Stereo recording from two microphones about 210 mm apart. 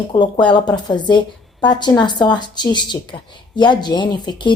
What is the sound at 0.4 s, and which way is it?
A woman's voice, 20° left (ahead or behind).